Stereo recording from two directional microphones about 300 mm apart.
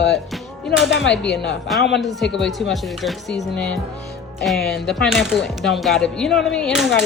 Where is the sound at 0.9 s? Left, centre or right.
Left.